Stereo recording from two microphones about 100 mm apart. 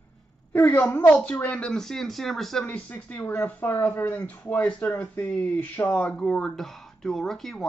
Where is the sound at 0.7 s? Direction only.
10° left (ahead or behind).